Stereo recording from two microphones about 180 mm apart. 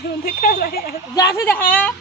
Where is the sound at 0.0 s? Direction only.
60° left (ahead or behind).